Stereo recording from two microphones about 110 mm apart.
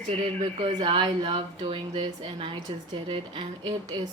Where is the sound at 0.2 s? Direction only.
70° right (ahead or behind).